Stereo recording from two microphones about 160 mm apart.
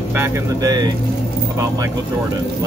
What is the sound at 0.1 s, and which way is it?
Speech, 20° right (ahead or behind).